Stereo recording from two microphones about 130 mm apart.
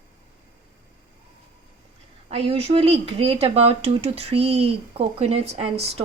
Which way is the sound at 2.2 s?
50° right (ahead or behind).